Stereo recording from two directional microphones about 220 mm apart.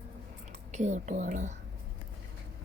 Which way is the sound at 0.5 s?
30° right (ahead or behind).